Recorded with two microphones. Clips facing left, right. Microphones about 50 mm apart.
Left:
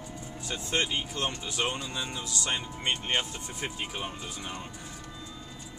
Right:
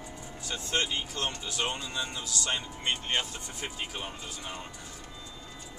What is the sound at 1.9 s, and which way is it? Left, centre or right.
Speech, centre.